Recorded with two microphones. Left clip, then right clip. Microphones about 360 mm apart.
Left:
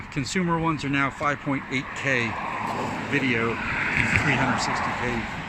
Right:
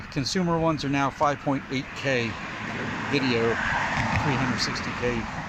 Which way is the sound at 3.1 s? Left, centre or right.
Centre.